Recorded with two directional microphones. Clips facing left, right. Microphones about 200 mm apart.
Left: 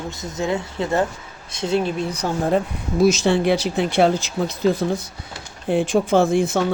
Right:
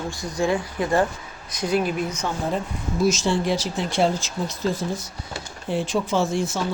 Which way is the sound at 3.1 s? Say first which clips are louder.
Left 4 dB; 65° left (ahead or behind).